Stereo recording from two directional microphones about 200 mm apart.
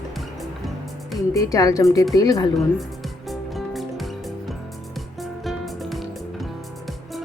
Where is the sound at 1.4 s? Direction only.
15° left (ahead or behind).